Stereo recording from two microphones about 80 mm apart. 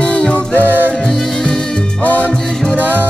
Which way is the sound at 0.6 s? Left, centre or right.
Right.